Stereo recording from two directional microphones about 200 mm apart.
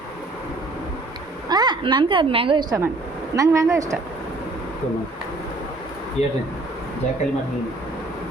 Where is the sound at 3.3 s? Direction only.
15° right (ahead or behind).